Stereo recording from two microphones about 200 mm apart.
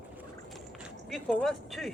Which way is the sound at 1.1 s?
5° left (ahead or behind).